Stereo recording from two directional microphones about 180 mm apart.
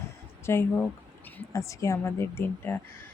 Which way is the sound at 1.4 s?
15° left (ahead or behind).